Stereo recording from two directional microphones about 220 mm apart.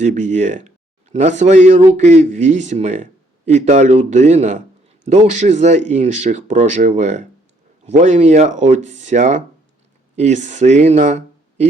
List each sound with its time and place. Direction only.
0.0 s a man's voice: 35° right (ahead or behind)